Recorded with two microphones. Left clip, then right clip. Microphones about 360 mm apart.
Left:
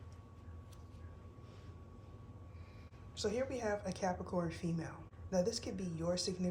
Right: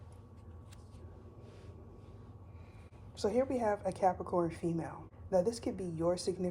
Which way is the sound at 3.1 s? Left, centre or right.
Centre.